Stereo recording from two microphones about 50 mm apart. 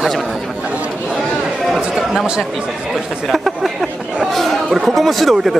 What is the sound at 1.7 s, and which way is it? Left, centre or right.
Speech, centre.